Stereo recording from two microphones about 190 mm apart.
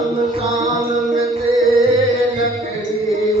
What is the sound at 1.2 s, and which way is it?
Music, centre (ahead or behind).